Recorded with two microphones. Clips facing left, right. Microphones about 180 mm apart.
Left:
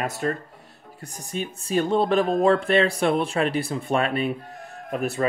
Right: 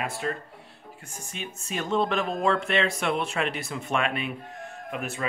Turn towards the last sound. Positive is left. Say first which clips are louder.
# left 7 dB
turn(degrees=40)  # may be behind; listen again after turning